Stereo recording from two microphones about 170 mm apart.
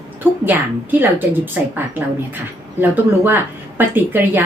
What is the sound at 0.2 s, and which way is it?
Speech, 10° right (ahead or behind).